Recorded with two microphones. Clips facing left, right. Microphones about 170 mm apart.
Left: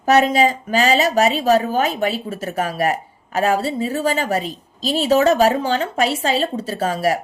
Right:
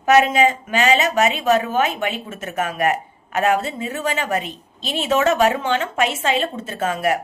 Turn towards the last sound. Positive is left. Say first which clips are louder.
# left 2 dB
turn(degrees=35)  # may be behind; listen again after turning